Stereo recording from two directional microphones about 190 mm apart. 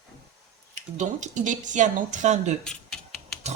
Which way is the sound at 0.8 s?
40° right (ahead or behind).